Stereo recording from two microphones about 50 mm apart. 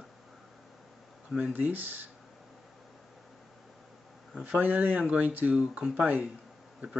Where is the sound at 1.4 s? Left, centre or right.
Right.